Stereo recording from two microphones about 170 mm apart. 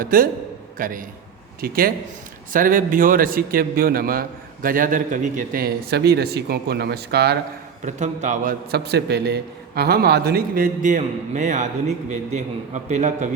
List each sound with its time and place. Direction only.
0.0 s a man's voice: 55° right (ahead or behind); by 7.3 s 70° right (ahead or behind)
7.9 s a man's voice: 45° right (ahead or behind)
8.7 s a man's voice: 75° right (ahead or behind); by 13.3 s 45° right (ahead or behind)